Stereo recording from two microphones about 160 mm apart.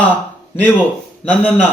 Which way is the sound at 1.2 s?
10° left (ahead or behind).